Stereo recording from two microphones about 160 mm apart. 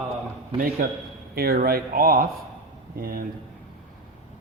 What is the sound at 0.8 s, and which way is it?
Speech, 60° right (ahead or behind).